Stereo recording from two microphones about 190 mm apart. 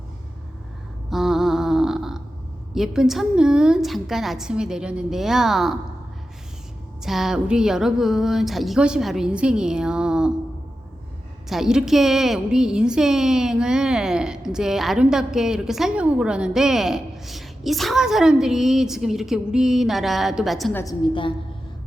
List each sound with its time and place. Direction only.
1.1 s a sound: centre (ahead or behind)
2.7 s a woman's voice: centre (ahead or behind)
7.0 s a woman's voice: centre (ahead or behind)
11.4 s a woman's voice: centre (ahead or behind)
20.7 s a woman's voice: 20° left (ahead or behind)